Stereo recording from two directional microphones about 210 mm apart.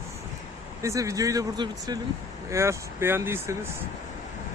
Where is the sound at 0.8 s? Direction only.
15° right (ahead or behind).